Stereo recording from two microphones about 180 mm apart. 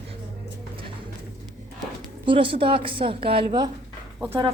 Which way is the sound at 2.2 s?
30° right (ahead or behind).